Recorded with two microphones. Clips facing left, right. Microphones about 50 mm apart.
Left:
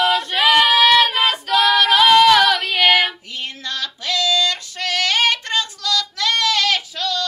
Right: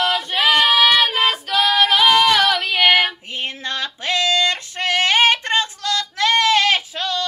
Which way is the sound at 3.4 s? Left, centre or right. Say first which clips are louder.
Right 2 dB; right.